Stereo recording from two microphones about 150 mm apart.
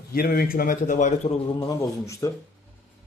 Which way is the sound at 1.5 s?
25° left (ahead or behind).